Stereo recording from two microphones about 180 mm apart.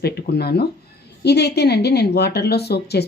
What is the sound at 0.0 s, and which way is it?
A woman's voice, 60° left (ahead or behind).